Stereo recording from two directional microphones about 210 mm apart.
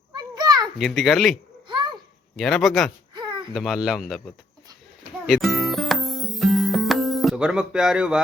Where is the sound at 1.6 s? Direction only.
20° right (ahead or behind).